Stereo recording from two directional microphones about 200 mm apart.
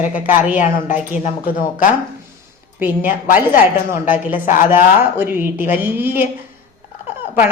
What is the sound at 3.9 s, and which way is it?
A woman's voice, 10° right (ahead or behind).